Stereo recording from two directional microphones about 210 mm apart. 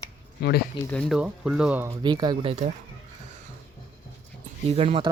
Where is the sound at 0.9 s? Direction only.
5° left (ahead or behind).